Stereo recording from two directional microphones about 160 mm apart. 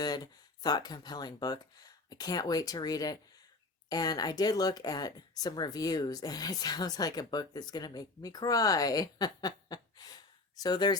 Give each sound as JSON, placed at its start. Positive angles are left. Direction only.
{"t": 0.6, "sound": "speech", "side_deg": 25}